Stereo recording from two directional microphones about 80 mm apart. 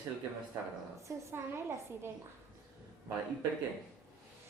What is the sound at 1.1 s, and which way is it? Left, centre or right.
Speech, right.